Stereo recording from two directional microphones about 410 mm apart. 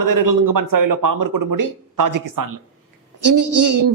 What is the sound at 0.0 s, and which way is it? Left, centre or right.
A man's voice, right.